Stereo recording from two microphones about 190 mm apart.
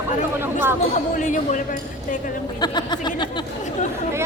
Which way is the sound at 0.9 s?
40° left (ahead or behind).